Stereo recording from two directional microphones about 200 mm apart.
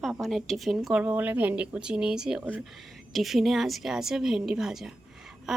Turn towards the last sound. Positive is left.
turn(degrees=0)  # may be behind; listen again after turning